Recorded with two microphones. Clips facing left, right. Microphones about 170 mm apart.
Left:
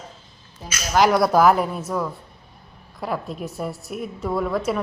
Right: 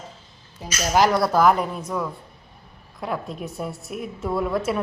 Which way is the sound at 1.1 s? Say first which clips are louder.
Left 2 dB; 10° left (ahead or behind).